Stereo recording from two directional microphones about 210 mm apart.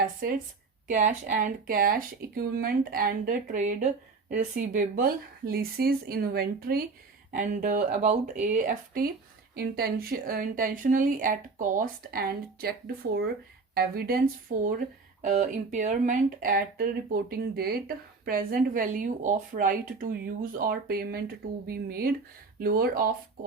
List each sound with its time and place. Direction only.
0.2 s speech: 45° right (ahead or behind)